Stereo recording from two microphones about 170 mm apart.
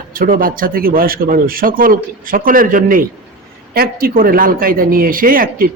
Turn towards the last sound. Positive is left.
turn(degrees=-55)  # may be behind; listen again after turning